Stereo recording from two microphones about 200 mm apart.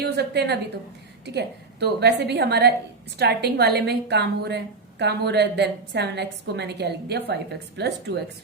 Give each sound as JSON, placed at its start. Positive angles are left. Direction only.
{"t": 0.0, "sound": "a woman's voice", "side_deg": -55}